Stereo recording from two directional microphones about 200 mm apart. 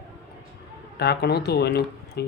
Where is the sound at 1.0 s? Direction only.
55° left (ahead or behind).